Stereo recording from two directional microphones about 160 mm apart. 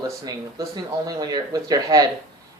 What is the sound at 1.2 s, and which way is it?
Speech, 25° right (ahead or behind).